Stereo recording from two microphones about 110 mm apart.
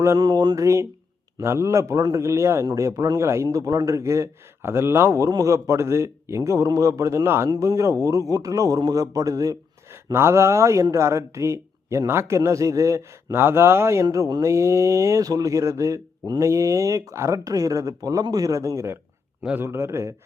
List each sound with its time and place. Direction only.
0.2 s a man's voice: 35° right (ahead or behind)
19.4 s a man's voice: 10° right (ahead or behind)
19.6 s speech: 20° right (ahead or behind)